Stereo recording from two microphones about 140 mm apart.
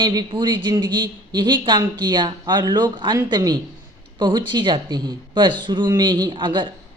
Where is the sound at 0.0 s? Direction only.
30° right (ahead or behind).